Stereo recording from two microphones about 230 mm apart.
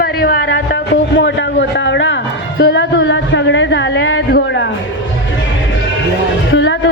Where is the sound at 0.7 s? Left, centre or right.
Left.